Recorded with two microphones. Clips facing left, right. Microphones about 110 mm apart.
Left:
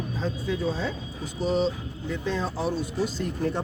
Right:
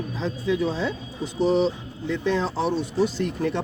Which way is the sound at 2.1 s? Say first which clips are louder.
Right 5 dB; 80° right.